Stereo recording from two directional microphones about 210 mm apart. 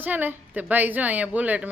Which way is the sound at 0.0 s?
10° right (ahead or behind).